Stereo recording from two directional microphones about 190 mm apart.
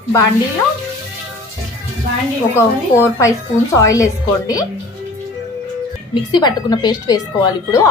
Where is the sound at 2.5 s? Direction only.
15° left (ahead or behind).